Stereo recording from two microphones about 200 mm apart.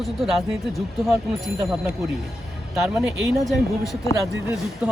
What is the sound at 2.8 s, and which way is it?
Speech, centre (ahead or behind).